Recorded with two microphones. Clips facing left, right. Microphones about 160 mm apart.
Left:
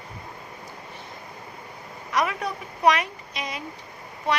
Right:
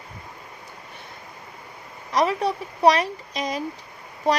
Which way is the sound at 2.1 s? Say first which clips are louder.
Right 4 dB; 30° right (ahead or behind).